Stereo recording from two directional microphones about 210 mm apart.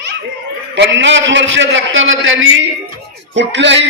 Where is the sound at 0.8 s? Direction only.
60° right (ahead or behind).